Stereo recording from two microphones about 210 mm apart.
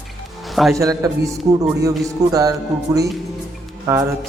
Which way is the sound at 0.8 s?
15° right (ahead or behind).